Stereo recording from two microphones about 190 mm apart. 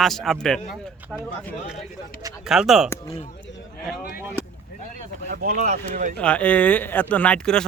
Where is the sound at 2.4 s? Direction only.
Centre (ahead or behind).